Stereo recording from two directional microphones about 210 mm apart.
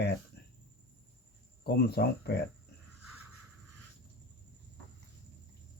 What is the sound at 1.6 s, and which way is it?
Speech, 50° left (ahead or behind).